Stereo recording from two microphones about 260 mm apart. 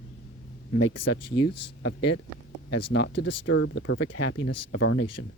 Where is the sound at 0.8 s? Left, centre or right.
Left.